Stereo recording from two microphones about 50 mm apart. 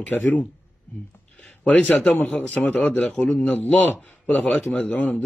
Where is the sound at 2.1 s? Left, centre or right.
Left.